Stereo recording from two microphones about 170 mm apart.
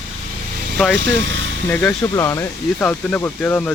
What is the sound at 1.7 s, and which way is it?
Speech, 5° left (ahead or behind).